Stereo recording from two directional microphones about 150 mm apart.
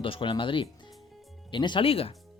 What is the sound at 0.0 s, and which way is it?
Speech, 35° left (ahead or behind).